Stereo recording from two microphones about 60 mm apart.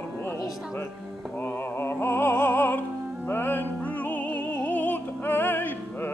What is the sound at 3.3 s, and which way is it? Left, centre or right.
Music, left.